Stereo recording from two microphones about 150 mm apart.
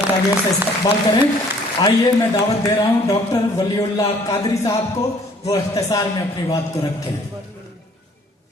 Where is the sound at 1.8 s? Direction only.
25° left (ahead or behind).